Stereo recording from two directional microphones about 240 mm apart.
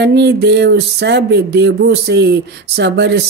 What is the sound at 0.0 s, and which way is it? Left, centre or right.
Music, right.